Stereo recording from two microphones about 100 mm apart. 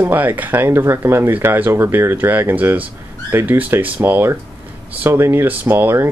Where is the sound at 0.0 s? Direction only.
20° right (ahead or behind).